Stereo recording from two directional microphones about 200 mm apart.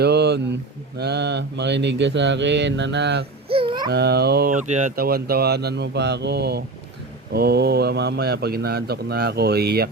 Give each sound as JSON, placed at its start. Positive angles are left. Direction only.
{"t": 0.0, "sound": "speech", "side_deg": -55}
{"t": 0.9, "sound": "mantra", "side_deg": -55}
{"t": 3.5, "sound": "babbling", "side_deg": -25}
{"t": 3.9, "sound": "speech", "side_deg": -55}